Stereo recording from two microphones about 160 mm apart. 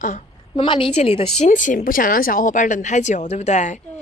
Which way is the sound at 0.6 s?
35° left (ahead or behind).